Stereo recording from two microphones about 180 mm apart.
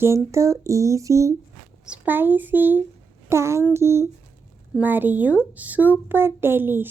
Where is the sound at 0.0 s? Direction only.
15° right (ahead or behind).